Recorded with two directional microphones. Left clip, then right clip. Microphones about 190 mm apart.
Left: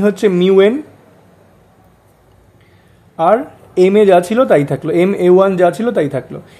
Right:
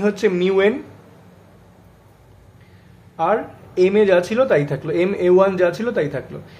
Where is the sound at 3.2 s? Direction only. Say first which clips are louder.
Left 7 dB; 45° left (ahead or behind).